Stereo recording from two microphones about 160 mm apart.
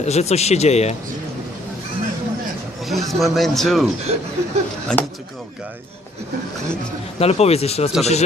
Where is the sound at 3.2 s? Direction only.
Centre (ahead or behind).